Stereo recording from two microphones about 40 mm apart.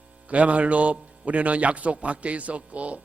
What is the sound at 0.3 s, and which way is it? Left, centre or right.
A man's voice, right.